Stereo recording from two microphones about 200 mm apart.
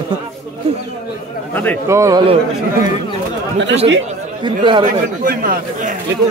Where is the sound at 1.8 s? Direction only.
15° right (ahead or behind).